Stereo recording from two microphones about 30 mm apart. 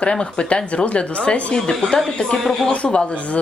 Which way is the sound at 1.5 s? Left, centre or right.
Left.